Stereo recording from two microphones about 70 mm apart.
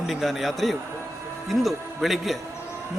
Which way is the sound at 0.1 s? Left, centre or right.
Centre.